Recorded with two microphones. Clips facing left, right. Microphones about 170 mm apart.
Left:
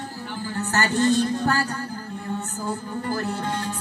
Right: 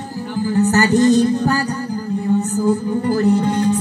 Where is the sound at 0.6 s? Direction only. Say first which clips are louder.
Right 8 dB; 40° right (ahead or behind).